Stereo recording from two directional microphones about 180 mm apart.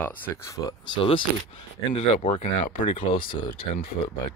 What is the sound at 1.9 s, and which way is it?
Speech, 40° left (ahead or behind).